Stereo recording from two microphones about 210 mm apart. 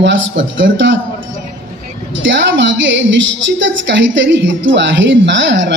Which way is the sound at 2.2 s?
60° right (ahead or behind).